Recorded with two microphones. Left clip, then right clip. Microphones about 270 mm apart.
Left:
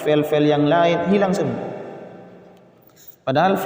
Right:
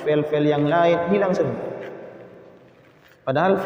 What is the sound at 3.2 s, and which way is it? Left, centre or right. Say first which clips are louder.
Speech: left 2 dB; left.